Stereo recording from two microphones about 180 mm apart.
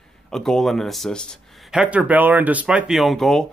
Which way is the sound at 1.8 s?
5° right (ahead or behind).